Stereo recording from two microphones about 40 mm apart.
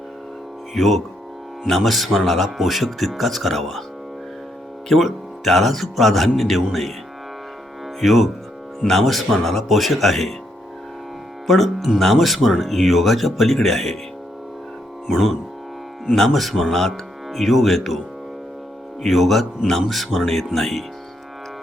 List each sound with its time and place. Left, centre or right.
0.7 s speech: centre
4.9 s speech: centre
8.0 s speech: centre
11.4 s speech: centre
15.0 s speech: centre
16.1 s speech: centre
19.0 s speech: centre